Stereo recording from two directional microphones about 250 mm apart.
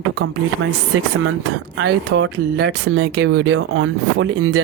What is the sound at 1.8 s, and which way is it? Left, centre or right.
Speech, right.